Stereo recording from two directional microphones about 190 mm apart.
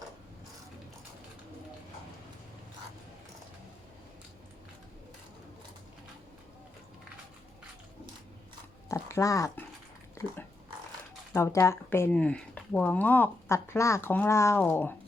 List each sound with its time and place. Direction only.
8.9 s dog: 15° left (ahead or behind)
11.3 s speech: 15° left (ahead or behind)